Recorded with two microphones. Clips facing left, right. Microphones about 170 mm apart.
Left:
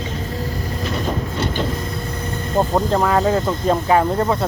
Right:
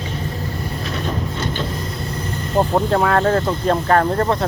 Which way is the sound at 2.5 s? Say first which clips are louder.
Right 1 dB; 5° right (ahead or behind).